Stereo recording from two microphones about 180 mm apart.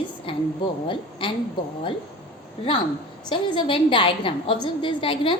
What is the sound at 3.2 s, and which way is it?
A woman's voice, 25° left (ahead or behind).